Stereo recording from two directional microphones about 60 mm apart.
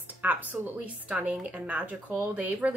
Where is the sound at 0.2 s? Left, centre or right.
Right.